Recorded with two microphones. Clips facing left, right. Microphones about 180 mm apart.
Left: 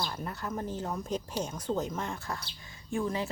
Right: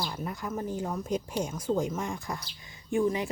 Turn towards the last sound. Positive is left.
turn(degrees=-15)  # may be behind; listen again after turning